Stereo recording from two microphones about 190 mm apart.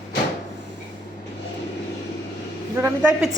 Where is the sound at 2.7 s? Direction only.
10° right (ahead or behind).